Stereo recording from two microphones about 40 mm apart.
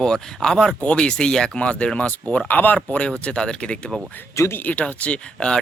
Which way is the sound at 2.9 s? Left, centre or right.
Left.